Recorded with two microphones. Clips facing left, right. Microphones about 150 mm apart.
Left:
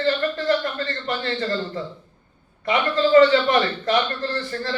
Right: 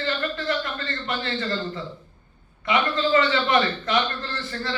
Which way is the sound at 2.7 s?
40° left (ahead or behind).